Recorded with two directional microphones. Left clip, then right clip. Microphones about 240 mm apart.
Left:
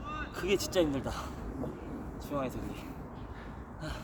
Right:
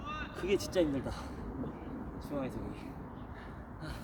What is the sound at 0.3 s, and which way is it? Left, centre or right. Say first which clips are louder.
Speech: left 2 dB; left.